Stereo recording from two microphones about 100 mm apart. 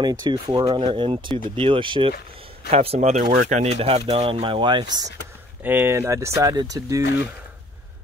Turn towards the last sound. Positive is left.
turn(degrees=-35)  # may be behind; listen again after turning